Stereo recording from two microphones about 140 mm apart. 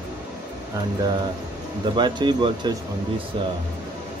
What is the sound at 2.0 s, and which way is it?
Speech, 30° right (ahead or behind).